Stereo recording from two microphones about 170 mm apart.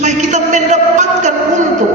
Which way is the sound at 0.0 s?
45° right (ahead or behind).